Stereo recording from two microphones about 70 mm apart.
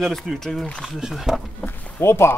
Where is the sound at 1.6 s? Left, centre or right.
Left.